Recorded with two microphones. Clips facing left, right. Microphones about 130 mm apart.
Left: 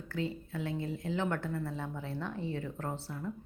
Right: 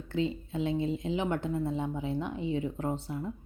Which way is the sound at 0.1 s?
20° right (ahead or behind).